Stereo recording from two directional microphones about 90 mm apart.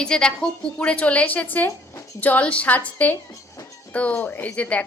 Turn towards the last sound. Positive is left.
turn(degrees=15)  # may be behind; listen again after turning